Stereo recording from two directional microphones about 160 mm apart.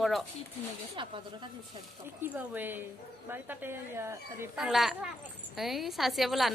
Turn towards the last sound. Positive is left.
turn(degrees=0)  # may be behind; listen again after turning